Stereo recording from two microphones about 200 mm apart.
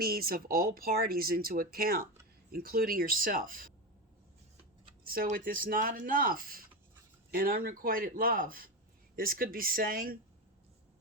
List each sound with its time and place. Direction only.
0.0 s speech: 50° right (ahead or behind)
5.0 s speech: 45° right (ahead or behind)